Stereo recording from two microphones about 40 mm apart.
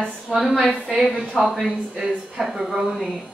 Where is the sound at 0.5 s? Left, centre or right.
Centre.